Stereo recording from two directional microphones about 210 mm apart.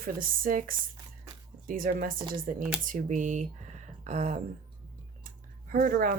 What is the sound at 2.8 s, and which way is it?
Speech, 35° right (ahead or behind).